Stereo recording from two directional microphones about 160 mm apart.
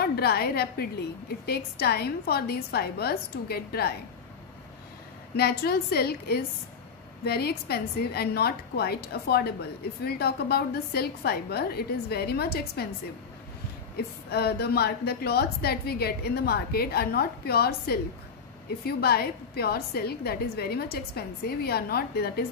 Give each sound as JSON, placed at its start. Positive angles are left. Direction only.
{"t": 0.0, "sound": "a woman's voice", "side_deg": 85}
{"t": 5.3, "sound": "a woman's voice", "side_deg": 85}
{"t": 14.3, "sound": "a woman's voice", "side_deg": 85}